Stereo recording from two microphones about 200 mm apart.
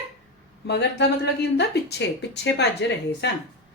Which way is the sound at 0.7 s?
55° left (ahead or behind).